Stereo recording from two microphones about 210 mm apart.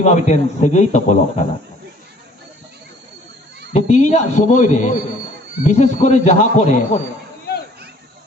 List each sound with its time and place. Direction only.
0.0 s speech: 35° left (ahead or behind)
3.7 s speech: 30° left (ahead or behind)